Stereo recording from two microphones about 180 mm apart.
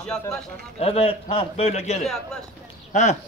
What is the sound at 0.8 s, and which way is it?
A man's voice, 35° left (ahead or behind).